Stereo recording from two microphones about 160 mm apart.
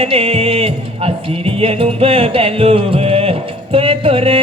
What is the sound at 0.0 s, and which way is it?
Music, 40° right (ahead or behind).